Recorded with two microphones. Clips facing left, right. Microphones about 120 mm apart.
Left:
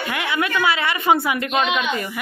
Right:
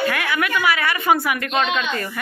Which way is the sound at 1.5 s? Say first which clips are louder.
Even; 10° left (ahead or behind).